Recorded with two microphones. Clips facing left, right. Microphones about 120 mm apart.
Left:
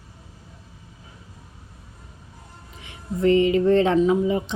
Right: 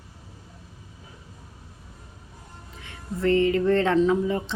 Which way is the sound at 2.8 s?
15° left (ahead or behind).